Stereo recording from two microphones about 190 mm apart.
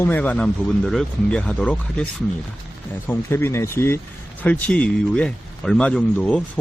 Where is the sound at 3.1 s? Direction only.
10° left (ahead or behind).